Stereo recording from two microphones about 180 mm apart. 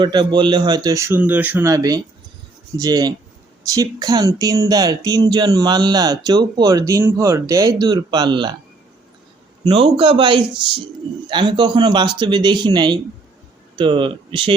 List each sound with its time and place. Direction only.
0.0 s speech: 25° right (ahead or behind)
9.6 s speech: 30° right (ahead or behind)